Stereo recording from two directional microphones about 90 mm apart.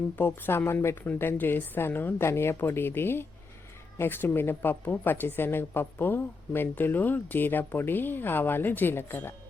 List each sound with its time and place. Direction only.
0.2 s speech: 25° left (ahead or behind)